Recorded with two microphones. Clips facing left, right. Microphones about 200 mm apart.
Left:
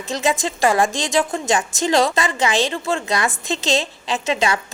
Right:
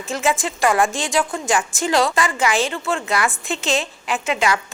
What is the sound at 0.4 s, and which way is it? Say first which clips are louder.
Speech: left 1 dB; 25° left (ahead or behind).